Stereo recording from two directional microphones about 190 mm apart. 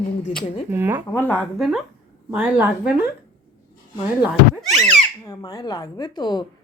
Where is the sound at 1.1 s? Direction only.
10° left (ahead or behind).